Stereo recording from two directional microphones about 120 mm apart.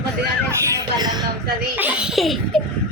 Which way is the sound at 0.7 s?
35° right (ahead or behind).